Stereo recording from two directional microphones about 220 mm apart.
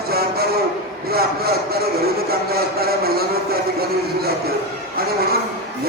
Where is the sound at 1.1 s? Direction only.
45° right (ahead or behind).